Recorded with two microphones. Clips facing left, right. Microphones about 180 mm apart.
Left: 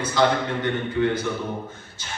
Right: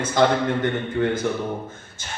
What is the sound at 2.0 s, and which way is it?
Music, 50° right (ahead or behind).